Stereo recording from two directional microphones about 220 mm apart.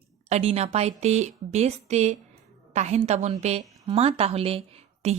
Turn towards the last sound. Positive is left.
turn(degrees=-30)  # may be behind; listen again after turning